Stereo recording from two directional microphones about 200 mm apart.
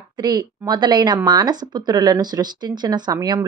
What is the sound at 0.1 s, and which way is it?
A woman's voice, 20° right (ahead or behind).